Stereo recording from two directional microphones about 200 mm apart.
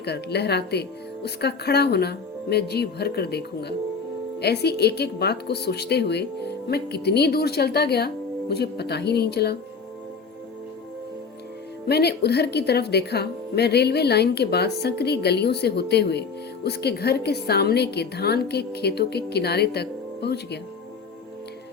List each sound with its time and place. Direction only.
0.0 s speech: 55° left (ahead or behind)
11.9 s a woman's voice: 55° left (ahead or behind)